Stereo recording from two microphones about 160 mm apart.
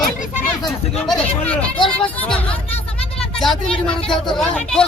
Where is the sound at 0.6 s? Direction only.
Centre (ahead or behind).